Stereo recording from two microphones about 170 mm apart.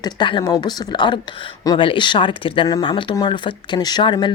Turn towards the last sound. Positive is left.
turn(degrees=25)  # may be behind; listen again after turning